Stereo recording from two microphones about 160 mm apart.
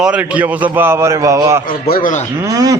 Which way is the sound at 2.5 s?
20° right (ahead or behind).